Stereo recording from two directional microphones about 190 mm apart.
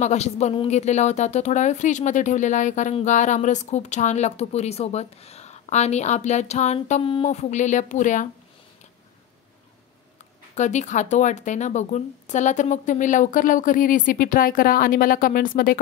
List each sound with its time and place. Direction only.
0.0 s speech: 35° left (ahead or behind)
10.5 s speech: 40° left (ahead or behind)